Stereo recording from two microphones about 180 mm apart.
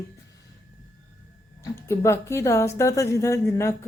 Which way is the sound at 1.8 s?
15° left (ahead or behind).